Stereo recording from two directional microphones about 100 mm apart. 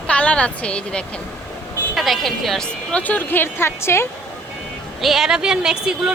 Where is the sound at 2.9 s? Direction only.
15° left (ahead or behind).